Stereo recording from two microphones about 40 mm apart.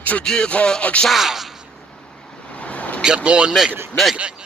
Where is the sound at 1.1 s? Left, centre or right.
Centre.